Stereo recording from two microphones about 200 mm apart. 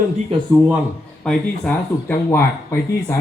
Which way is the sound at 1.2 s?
5° left (ahead or behind).